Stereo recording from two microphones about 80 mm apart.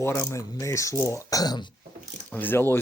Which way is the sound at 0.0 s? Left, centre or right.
Left.